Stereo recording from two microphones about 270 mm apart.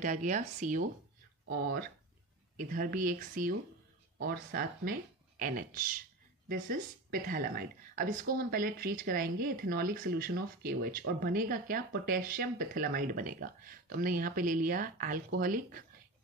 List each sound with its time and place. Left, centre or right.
0.0 s speech: right